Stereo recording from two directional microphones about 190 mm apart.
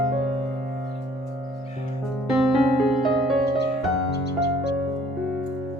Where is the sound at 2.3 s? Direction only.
Centre (ahead or behind).